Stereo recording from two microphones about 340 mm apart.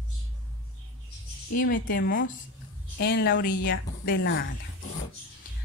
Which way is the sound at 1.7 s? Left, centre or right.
Left.